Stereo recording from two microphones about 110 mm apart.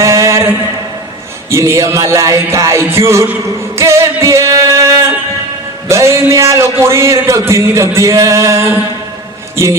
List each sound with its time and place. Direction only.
0.0 s mantra: 25° right (ahead or behind)
1.5 s music: 25° right (ahead or behind)
3.8 s singing: 25° right (ahead or behind)
5.9 s music: 25° right (ahead or behind)